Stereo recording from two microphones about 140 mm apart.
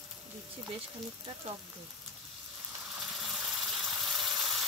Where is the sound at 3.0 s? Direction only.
5° right (ahead or behind).